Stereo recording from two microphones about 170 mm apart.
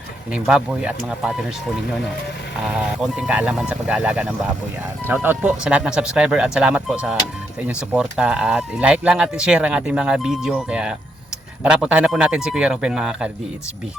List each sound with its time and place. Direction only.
0.3 s speech: 5° right (ahead or behind)
2.6 s speech: 5° right (ahead or behind)